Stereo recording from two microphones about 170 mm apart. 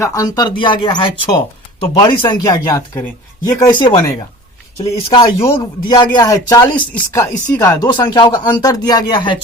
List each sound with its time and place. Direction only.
0.0 s speech: 20° left (ahead or behind)
5.0 s speech: 30° left (ahead or behind)